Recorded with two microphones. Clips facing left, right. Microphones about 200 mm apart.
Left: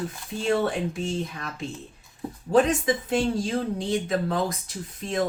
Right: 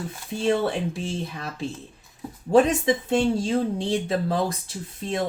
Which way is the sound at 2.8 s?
30° right (ahead or behind).